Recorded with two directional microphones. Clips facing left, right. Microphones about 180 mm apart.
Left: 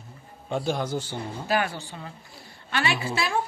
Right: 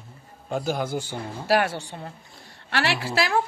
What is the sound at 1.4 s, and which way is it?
A woman's voice, 75° right (ahead or behind).